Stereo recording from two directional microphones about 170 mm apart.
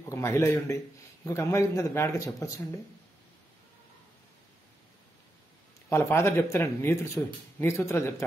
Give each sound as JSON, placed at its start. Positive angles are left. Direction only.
{"t": 0.1, "sound": "speech", "side_deg": 15}
{"t": 5.9, "sound": "speech", "side_deg": 15}